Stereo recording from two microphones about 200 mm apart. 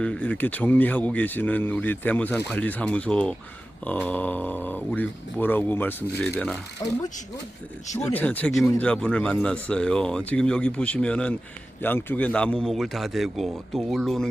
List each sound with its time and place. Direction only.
0.0 s a man's voice: 5° left (ahead or behind)